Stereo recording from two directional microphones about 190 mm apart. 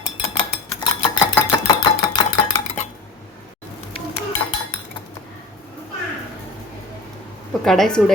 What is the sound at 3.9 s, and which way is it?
Dishes, 30° left (ahead or behind).